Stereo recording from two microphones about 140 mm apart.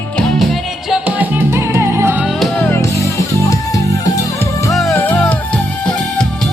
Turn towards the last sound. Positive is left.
turn(degrees=10)  # may be behind; listen again after turning